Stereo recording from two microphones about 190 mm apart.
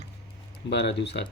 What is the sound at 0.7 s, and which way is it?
Speech, 65° left (ahead or behind).